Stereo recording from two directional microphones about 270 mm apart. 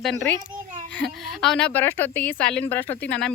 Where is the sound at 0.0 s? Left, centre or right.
Centre.